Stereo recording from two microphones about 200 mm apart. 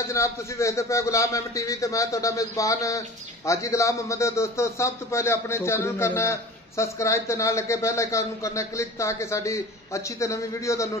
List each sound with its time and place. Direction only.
0.0 s speech: 15° left (ahead or behind)